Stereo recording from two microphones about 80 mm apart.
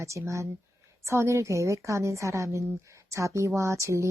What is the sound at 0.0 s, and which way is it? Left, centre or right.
A woman's voice, right.